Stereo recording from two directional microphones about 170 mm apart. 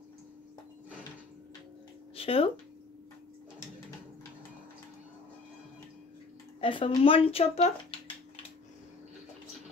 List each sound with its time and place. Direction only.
2.1 s speech: 35° left (ahead or behind)
6.6 s speech: 30° left (ahead or behind)